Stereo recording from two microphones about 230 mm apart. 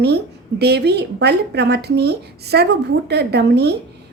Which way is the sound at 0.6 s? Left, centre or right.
Right.